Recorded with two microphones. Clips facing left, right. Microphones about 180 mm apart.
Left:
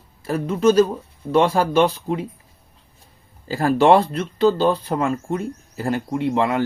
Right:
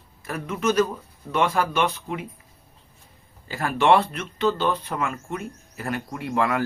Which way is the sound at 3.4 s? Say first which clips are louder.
Left 5 dB; 35° left (ahead or behind).